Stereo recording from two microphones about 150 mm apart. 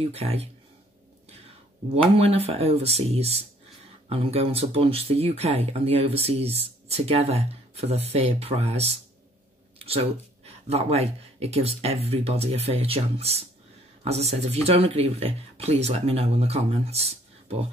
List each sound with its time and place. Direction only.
0.1 s speech: 40° right (ahead or behind)
2.1 s speech: 40° right (ahead or behind)